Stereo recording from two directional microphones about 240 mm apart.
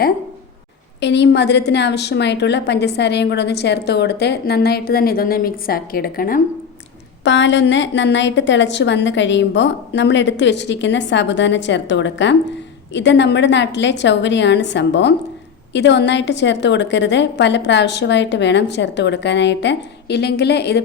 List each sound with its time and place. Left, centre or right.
1.0 s a woman's voice: left
7.3 s a woman's voice: left